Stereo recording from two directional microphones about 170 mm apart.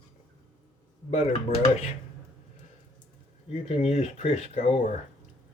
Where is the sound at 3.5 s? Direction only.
35° left (ahead or behind).